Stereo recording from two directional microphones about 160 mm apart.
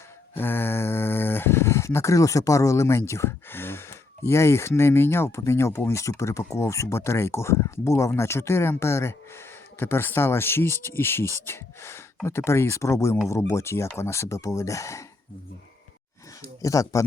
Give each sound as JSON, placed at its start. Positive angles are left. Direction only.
{"t": 0.3, "sound": "speech", "side_deg": 15}
{"t": 16.6, "sound": "speech", "side_deg": 20}